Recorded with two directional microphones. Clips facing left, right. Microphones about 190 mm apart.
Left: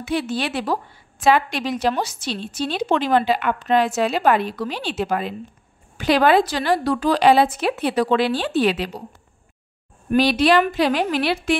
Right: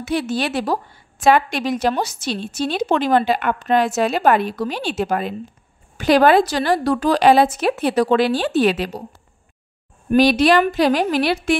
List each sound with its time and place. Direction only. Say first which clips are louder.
0.0 s a woman's voice: right 2 dB; 40° right (ahead or behind)
10.1 s a woman's voice: right 2 dB; 45° right (ahead or behind)